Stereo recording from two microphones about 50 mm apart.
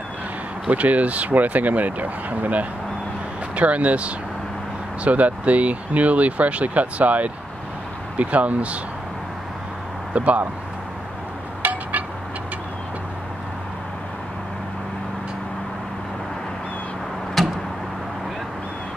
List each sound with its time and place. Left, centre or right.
0.7 s speech: right
10.1 s speech: right
17.4 s a sound: centre